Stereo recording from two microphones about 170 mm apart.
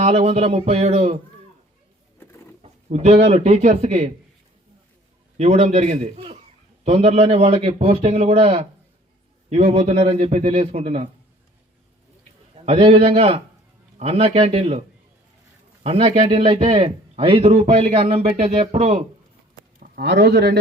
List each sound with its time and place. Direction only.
0.0 s a man's voice: 35° right (ahead or behind)
2.6 s speech: 40° right (ahead or behind)
5.4 s a man's voice: 40° right (ahead or behind)
12.5 s a man's voice: 35° right (ahead or behind)
15.8 s a man's voice: 35° right (ahead or behind)
19.8 s a man's voice: 75° right (ahead or behind)